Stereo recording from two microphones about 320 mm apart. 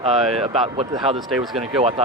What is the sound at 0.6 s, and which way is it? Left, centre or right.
Speech, centre.